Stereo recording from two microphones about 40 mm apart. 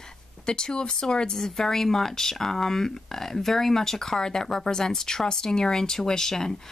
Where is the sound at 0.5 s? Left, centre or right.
Centre.